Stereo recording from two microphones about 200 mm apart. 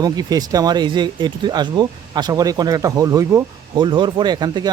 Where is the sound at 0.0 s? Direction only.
20° right (ahead or behind).